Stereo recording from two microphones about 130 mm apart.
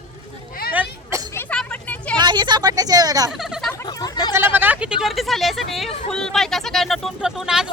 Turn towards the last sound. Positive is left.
turn(degrees=-5)  # may be behind; listen again after turning